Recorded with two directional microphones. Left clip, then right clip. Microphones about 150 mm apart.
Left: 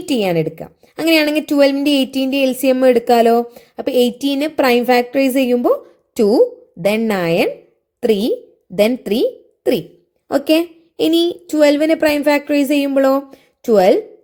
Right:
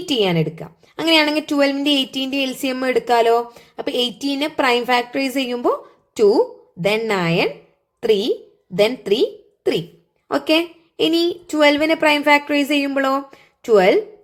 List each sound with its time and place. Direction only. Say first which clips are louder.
0.0 s a woman's voice: left 2 dB; 35° left (ahead or behind)